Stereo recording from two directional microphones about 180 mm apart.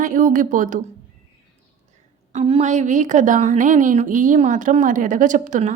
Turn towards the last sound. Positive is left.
turn(degrees=-45)  # may be behind; listen again after turning